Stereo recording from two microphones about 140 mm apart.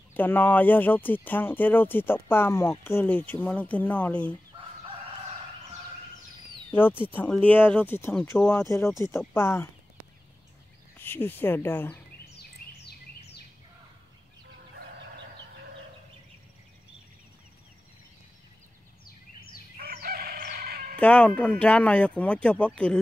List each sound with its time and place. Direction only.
0.1 s speech: 15° left (ahead or behind)
6.7 s speech: 15° left (ahead or behind)
11.0 s speech: 15° left (ahead or behind)
19.8 s crowing: 90° right
21.0 s speech: 10° left (ahead or behind)